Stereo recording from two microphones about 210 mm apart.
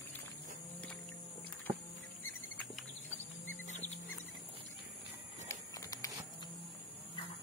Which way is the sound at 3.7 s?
35° left (ahead or behind).